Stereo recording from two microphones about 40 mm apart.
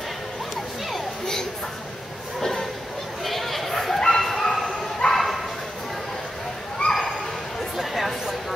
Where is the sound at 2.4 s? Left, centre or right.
Centre.